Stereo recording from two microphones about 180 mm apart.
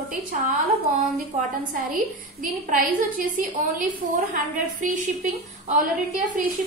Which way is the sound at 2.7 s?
45° right (ahead or behind).